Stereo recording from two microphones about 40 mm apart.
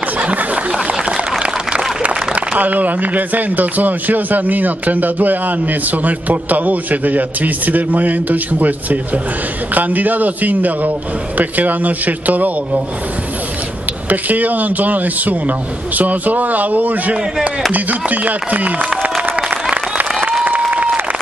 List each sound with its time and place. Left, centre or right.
0.2 s a sound: right
2.0 s a man's voice: right
14.0 s a man's voice: right
17.7 s chopping: right
20.7 s applause: right